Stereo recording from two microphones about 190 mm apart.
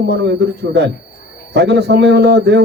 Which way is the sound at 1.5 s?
60° right (ahead or behind).